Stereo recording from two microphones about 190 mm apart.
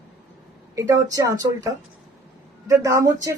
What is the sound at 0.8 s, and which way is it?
Speech, 15° right (ahead or behind).